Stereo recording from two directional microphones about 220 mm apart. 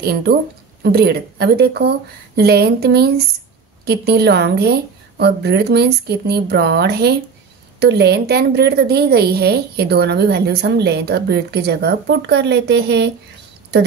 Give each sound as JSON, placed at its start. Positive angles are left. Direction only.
{"t": 0.0, "sound": "a woman's voice", "side_deg": -45}